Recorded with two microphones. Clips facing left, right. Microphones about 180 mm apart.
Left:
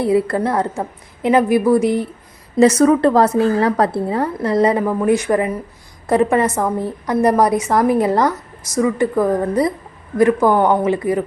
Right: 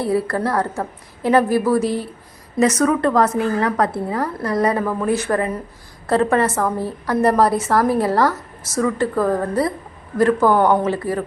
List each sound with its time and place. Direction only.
0.0 s speech: 20° left (ahead or behind)
2.6 s a woman's voice: 30° left (ahead or behind)